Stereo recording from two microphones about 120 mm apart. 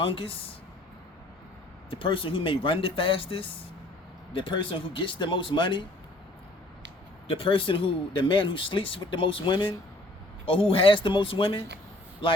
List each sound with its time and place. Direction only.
0.0 s speech: 50° left (ahead or behind)
1.9 s speech: 45° left (ahead or behind)
7.3 s speech: 50° left (ahead or behind)